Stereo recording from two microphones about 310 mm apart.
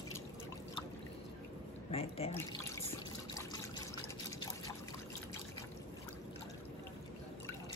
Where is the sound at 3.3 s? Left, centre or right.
Centre.